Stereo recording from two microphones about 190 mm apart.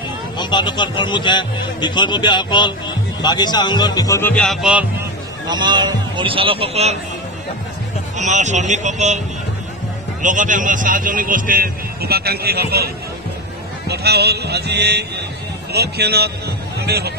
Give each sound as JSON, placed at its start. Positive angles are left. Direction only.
{"t": 0.4, "sound": "speech", "side_deg": 25}
{"t": 5.5, "sound": "a man's voice", "side_deg": -25}
{"t": 8.2, "sound": "speech", "side_deg": -40}
{"t": 10.2, "sound": "a man's voice", "side_deg": -45}